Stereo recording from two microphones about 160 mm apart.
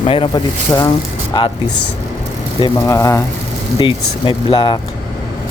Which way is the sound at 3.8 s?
30° left (ahead or behind).